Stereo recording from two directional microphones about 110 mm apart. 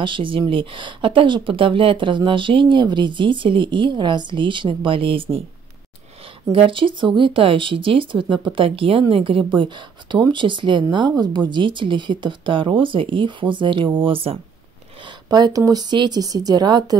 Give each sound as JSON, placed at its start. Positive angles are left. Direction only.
{"t": 0.0, "sound": "speech", "side_deg": -50}
{"t": 6.5, "sound": "speech", "side_deg": -50}
{"t": 15.0, "sound": "speech", "side_deg": -35}